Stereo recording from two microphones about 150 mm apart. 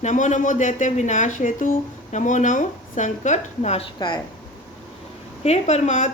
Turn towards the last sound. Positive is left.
turn(degrees=50)  # may be behind; listen again after turning